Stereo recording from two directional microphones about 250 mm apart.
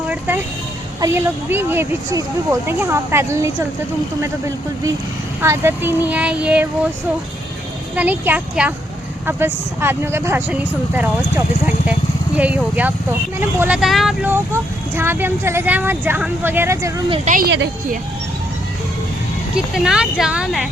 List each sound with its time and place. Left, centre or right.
0.1 s vehicle: centre
1.0 s speech: centre
7.9 s speech: centre
17.2 s speech: right
19.5 s speech: centre